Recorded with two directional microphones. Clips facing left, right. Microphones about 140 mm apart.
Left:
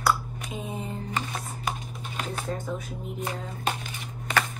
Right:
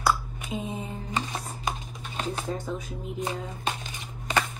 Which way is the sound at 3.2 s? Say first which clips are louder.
Right 2 dB; 20° right (ahead or behind).